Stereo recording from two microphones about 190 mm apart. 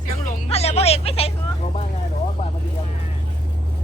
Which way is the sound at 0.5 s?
35° left (ahead or behind).